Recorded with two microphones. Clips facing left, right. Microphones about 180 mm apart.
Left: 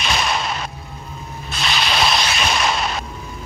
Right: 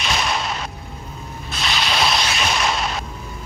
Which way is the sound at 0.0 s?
70° left (ahead or behind).